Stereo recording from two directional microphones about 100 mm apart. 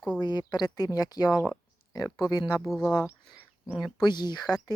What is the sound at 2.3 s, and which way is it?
Speech, 40° left (ahead or behind).